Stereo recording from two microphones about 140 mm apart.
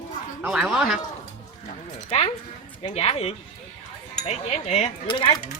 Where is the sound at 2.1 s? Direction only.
45° left (ahead or behind).